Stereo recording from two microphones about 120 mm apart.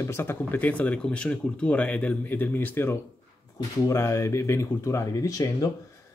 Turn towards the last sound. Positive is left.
turn(degrees=30)  # may be behind; listen again after turning